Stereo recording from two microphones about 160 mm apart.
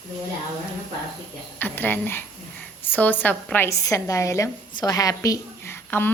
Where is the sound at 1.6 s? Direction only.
10° left (ahead or behind).